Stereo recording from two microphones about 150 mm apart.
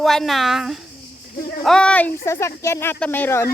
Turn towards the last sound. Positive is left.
turn(degrees=15)  # may be behind; listen again after turning